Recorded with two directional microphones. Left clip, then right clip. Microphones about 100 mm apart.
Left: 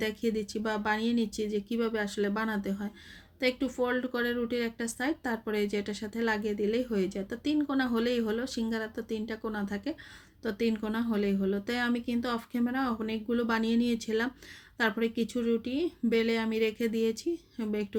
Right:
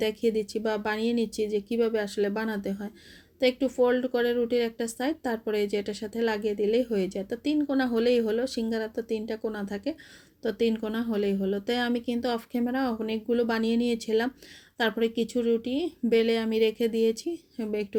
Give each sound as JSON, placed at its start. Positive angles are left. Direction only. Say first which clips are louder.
{"t": 0.0, "sound": "speech", "louder": "right 5 dB", "side_deg": -35}